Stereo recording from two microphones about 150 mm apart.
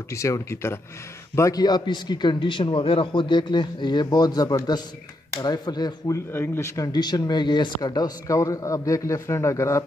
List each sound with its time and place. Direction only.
0.1 s speech: 20° left (ahead or behind)